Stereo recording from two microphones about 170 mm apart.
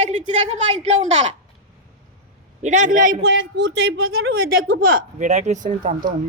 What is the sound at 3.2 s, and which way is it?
A woman's voice, 90° right.